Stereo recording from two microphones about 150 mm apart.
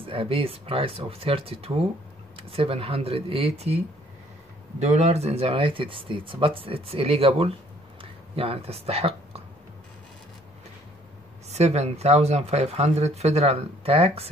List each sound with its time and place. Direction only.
0.0 s speech: 35° right (ahead or behind)
11.5 s speech: 45° right (ahead or behind)